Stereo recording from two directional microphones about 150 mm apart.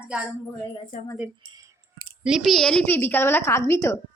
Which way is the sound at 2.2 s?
Centre (ahead or behind).